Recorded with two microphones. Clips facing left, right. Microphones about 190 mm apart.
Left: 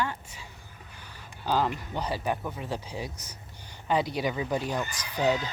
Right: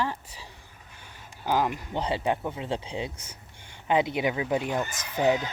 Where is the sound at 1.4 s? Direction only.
15° right (ahead or behind).